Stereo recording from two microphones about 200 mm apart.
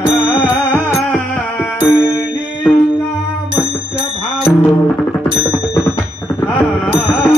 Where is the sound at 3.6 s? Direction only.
10° left (ahead or behind).